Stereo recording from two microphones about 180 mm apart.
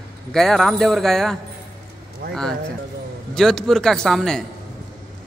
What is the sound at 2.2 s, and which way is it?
Speech, 60° right (ahead or behind).